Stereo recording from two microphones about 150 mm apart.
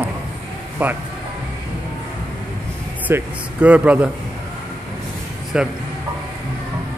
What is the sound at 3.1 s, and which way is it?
Speech, 15° right (ahead or behind).